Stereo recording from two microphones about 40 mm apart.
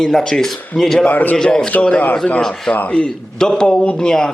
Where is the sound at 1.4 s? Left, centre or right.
Centre.